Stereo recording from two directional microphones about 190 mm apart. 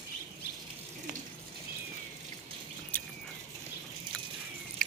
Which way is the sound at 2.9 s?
10° left (ahead or behind).